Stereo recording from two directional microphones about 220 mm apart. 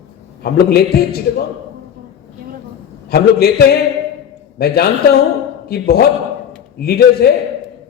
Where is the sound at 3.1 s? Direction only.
45° left (ahead or behind).